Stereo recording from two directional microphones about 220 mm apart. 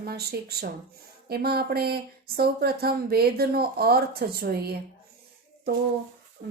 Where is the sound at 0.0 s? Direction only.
45° right (ahead or behind).